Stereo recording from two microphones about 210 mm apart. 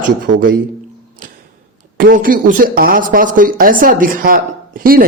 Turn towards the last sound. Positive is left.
turn(degrees=-40)  # may be behind; listen again after turning